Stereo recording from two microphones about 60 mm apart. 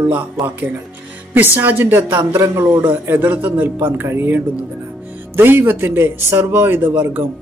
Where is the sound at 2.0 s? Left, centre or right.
Right.